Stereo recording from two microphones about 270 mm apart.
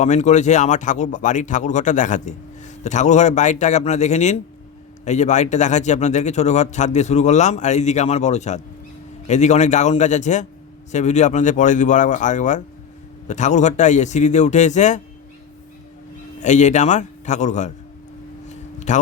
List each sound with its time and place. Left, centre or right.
0.0 s a man's voice: left
16.4 s a man's voice: left
18.4 s a sound: left